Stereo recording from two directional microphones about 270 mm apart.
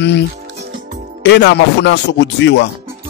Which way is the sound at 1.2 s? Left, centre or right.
Left.